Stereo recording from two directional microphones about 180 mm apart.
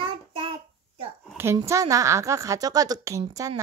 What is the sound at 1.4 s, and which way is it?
A woman's voice, 15° right (ahead or behind).